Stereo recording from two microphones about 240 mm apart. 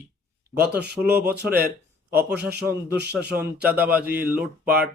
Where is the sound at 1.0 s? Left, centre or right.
Centre.